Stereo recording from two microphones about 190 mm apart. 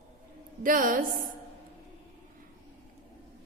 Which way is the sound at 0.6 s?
45° right (ahead or behind).